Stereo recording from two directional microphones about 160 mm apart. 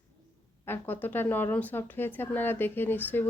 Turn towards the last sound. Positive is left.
turn(degrees=10)  # may be behind; listen again after turning